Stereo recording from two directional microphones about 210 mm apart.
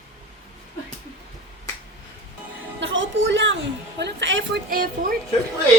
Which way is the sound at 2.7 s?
60° right (ahead or behind).